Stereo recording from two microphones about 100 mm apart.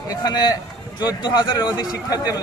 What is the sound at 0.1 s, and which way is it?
A man's voice, 45° left (ahead or behind).